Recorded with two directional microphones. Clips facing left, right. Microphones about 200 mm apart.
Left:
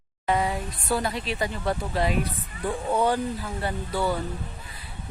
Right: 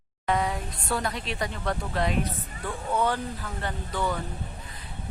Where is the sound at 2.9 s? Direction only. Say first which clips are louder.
Left 2 dB; 15° left (ahead or behind).